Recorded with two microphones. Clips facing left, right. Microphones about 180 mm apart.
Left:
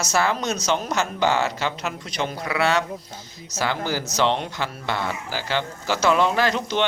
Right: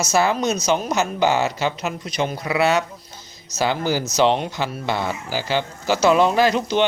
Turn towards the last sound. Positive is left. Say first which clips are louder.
# right 4 dB
turn(degrees=-15)  # may be behind; listen again after turning